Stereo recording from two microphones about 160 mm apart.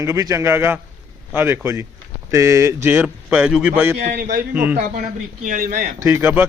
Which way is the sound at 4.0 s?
65° right (ahead or behind).